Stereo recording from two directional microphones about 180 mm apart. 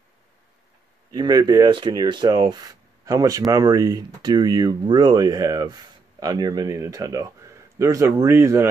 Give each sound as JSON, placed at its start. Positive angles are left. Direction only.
{"t": 1.1, "sound": "speech", "side_deg": -25}